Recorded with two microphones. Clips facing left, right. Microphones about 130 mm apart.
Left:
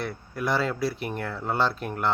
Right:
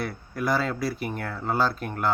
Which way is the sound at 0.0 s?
Centre (ahead or behind).